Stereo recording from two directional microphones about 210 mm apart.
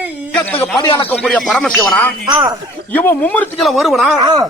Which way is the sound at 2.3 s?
20° right (ahead or behind).